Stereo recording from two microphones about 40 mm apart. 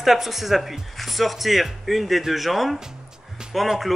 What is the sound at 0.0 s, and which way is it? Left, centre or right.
Speech, centre.